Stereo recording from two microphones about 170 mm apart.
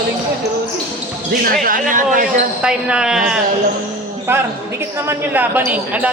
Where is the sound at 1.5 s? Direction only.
55° right (ahead or behind).